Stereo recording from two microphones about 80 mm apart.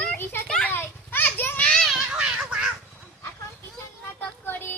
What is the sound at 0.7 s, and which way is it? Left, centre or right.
Children playing, left.